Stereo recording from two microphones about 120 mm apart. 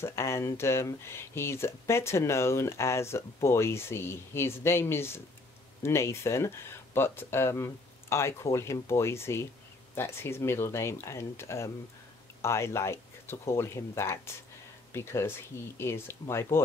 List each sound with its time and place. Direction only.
0.0 s speech: 25° left (ahead or behind)